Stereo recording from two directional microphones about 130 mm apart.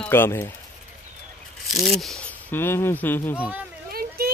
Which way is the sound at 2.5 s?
20° left (ahead or behind).